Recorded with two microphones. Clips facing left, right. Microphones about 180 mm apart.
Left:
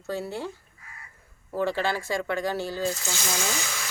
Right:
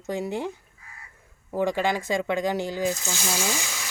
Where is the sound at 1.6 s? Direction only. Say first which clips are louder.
Right 2 dB; 15° right (ahead or behind).